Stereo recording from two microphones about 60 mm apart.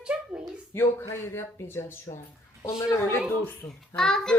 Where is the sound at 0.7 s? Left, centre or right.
Left.